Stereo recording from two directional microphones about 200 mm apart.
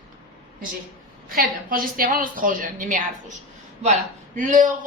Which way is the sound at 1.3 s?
45° right (ahead or behind).